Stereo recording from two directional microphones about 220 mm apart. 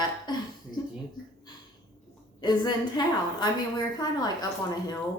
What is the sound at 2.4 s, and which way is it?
A woman's voice, 20° left (ahead or behind).